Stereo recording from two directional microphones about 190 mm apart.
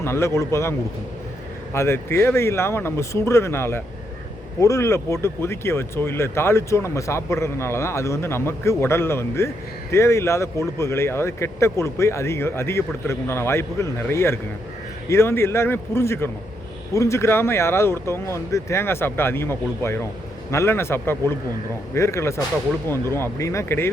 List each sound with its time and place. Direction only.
0.0 s speech: 15° left (ahead or behind)